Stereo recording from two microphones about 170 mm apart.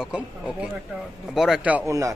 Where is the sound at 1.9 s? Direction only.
20° right (ahead or behind).